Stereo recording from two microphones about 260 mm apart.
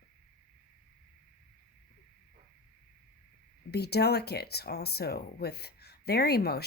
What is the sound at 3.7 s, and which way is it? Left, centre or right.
Speech, left.